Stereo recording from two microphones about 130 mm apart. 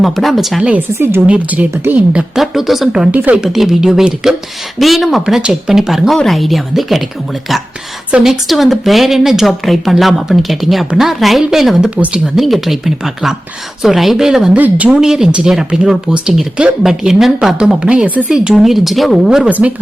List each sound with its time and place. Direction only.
0.0 s speech: centre (ahead or behind); by 2.0 s 20° right (ahead or behind)
2.1 s speech: 5° right (ahead or behind)
8.1 s speech: 5° right (ahead or behind)